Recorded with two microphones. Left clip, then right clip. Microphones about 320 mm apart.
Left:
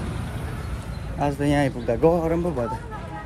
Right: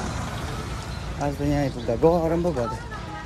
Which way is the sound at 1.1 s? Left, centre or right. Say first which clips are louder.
Left 4 dB; centre.